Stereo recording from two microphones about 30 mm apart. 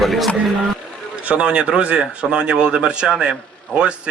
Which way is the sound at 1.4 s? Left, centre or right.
Right.